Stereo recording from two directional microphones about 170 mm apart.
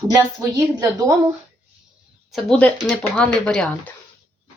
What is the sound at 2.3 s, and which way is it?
Speech, centre (ahead or behind).